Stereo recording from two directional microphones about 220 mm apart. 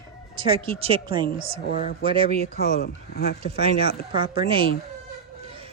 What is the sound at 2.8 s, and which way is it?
Speech, 45° left (ahead or behind).